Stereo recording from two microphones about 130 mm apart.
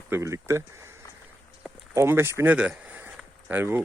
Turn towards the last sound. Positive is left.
turn(degrees=-15)  # may be behind; listen again after turning